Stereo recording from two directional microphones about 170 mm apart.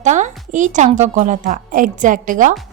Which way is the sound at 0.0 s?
45° right (ahead or behind).